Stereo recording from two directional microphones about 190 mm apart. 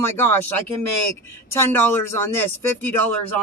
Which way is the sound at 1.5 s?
10° left (ahead or behind).